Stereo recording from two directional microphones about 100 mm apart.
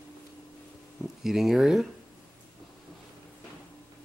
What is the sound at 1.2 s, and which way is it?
Speech, 5° right (ahead or behind).